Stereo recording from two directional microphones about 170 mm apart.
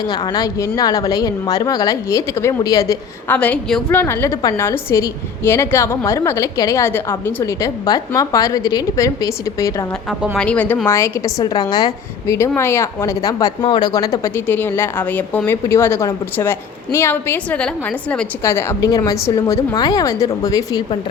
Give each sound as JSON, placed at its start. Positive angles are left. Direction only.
{"t": 0.0, "sound": "a woman's voice", "side_deg": 25}
{"t": 3.3, "sound": "a woman's voice", "side_deg": 5}
{"t": 10.3, "sound": "speech", "side_deg": 5}